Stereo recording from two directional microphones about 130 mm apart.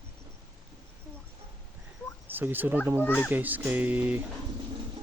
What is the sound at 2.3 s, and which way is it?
Speech, 15° right (ahead or behind).